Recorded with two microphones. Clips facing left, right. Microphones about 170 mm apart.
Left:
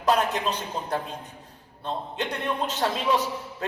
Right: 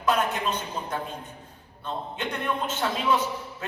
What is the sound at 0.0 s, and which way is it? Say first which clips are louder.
Speech: left 2 dB; 35° left (ahead or behind).